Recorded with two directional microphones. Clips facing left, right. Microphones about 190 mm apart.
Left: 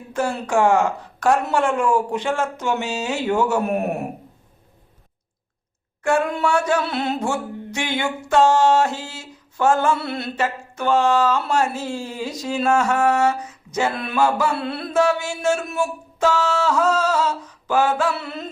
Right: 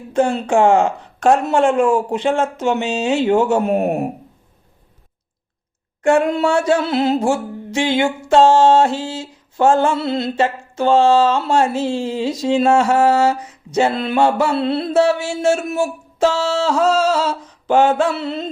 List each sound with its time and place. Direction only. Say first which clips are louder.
0.1 s speech: right 6 dB; 20° right (ahead or behind)
6.0 s speech: right 5 dB; 25° right (ahead or behind)